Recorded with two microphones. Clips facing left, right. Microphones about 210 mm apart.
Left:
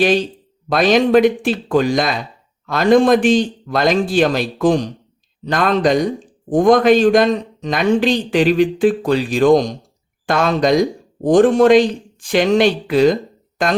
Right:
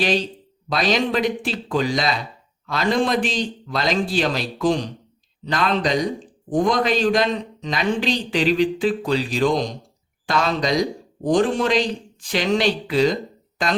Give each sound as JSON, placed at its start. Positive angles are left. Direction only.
{"t": 0.7, "sound": "a man's voice", "side_deg": 50}